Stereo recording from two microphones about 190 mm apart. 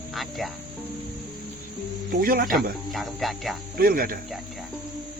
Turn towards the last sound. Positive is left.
turn(degrees=-50)  # may be behind; listen again after turning